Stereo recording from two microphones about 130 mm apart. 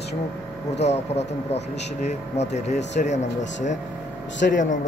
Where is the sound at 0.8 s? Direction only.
55° left (ahead or behind).